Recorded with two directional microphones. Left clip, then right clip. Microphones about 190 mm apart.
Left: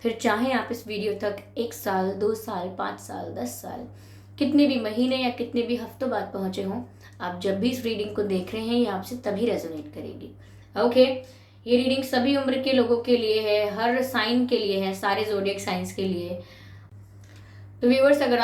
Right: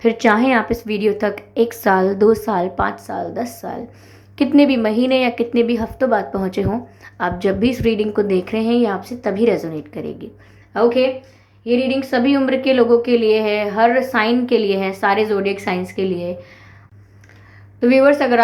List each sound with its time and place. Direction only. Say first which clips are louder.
0.0 s a woman's voice: right 10 dB; 35° right (ahead or behind)
17.7 s a woman's voice: right 6 dB; 45° right (ahead or behind)